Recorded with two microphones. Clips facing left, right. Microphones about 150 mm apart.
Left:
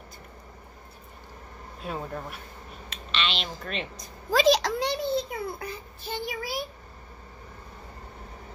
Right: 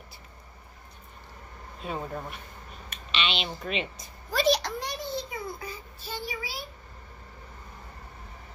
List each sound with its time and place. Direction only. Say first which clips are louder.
1.8 s speech: even; centre (ahead or behind)
3.2 s a sound: even; centre (ahead or behind)
3.6 s speech: right 4 dB; centre (ahead or behind)
4.3 s a child's voice: left 4 dB; 90° left; by 6.6 s 55° left (ahead or behind)